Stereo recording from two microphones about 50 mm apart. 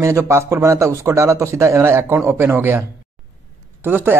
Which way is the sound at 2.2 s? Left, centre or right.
Right.